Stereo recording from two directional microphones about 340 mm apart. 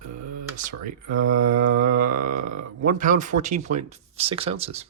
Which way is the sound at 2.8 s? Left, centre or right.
Right.